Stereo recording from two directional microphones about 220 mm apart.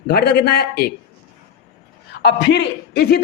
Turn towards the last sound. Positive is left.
turn(degrees=50)  # may be behind; listen again after turning